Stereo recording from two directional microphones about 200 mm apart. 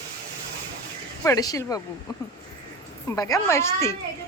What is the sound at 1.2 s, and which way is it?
Speech, 15° left (ahead or behind).